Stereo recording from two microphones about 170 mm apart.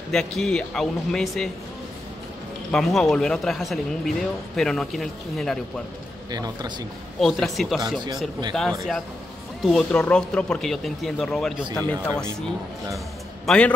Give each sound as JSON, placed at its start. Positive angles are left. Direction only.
{"t": 0.1, "sound": "speech", "side_deg": 5}
{"t": 2.7, "sound": "speech", "side_deg": 0}
{"t": 6.3, "sound": "a man's voice", "side_deg": -20}
{"t": 7.2, "sound": "speech", "side_deg": 0}
{"t": 13.5, "sound": "speech", "side_deg": 5}